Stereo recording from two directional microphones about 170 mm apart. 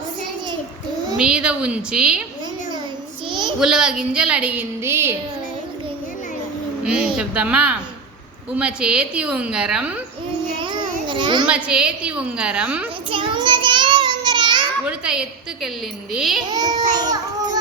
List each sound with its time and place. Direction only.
1.1 s a woman's voice: 5° right (ahead or behind)
3.2 s child singing: 25° right (ahead or behind)
3.6 s a woman's voice: 5° right (ahead or behind)
6.8 s a woman's voice: 5° right (ahead or behind)
10.6 s a sound: 30° right (ahead or behind)
11.4 s a woman's voice: 5° right (ahead or behind)
13.1 s child singing: 30° right (ahead or behind)
14.8 s a woman's voice: 5° right (ahead or behind)
16.5 s a child's voice: 25° right (ahead or behind)